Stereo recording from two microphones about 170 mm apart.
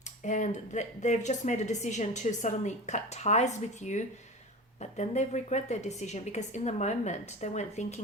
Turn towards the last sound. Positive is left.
turn(degrees=40)  # may be behind; listen again after turning